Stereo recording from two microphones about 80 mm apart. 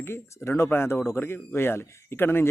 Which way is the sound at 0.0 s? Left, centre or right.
Left.